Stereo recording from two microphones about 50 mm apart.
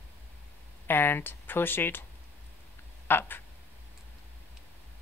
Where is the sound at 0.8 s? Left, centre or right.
Left.